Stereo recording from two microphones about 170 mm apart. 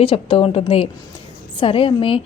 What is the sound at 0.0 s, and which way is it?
A woman's voice, 30° left (ahead or behind).